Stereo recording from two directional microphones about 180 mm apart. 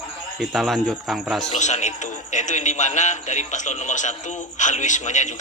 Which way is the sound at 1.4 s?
40° left (ahead or behind).